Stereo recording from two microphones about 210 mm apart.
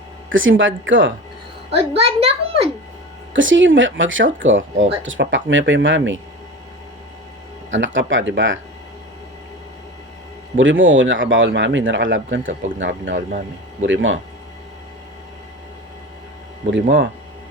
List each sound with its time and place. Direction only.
0.3 s speech: 65° right (ahead or behind)
1.7 s a child's voice: 25° right (ahead or behind)
3.3 s speech: 65° right (ahead or behind)
7.7 s speech: 60° right (ahead or behind)
10.6 s speech: 65° right (ahead or behind)